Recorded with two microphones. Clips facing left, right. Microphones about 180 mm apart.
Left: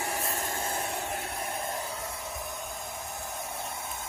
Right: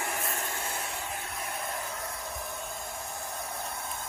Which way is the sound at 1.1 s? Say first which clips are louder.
Left 3 dB; 30° left (ahead or behind).